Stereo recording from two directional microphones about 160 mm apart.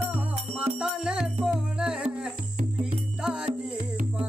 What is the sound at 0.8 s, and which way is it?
Music, 5° right (ahead or behind).